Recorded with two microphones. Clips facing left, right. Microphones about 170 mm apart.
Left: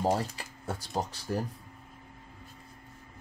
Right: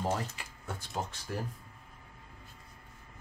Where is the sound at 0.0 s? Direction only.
35° left (ahead or behind).